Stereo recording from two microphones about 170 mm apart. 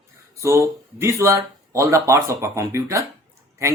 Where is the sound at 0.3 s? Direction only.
15° right (ahead or behind).